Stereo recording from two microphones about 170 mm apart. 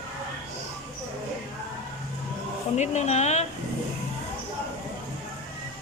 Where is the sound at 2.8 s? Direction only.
40° left (ahead or behind).